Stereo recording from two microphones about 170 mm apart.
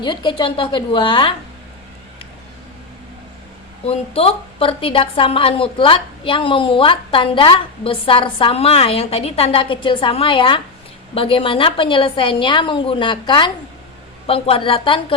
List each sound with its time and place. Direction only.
0.0 s a woman's voice: 25° left (ahead or behind)
3.8 s a woman's voice: 35° left (ahead or behind)